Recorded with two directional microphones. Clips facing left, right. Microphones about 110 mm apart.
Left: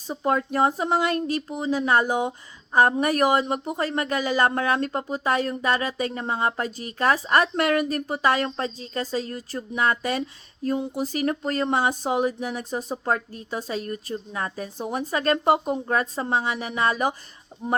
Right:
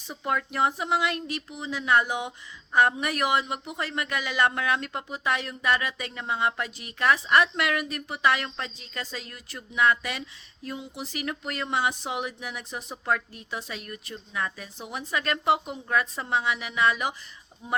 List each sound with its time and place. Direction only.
0.1 s a woman's voice: 35° left (ahead or behind)
17.6 s speech: 55° left (ahead or behind)